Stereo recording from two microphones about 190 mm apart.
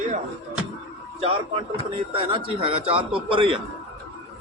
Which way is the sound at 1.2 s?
30° right (ahead or behind).